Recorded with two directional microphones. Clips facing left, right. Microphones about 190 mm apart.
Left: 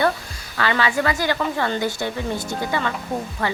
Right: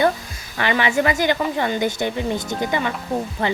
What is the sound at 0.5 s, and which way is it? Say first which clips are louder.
Speech: right 2 dB; 20° right (ahead or behind).